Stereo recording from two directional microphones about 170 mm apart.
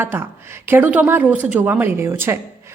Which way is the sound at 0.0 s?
15° right (ahead or behind).